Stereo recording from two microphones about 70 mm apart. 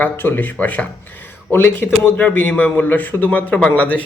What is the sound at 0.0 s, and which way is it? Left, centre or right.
Speech, left.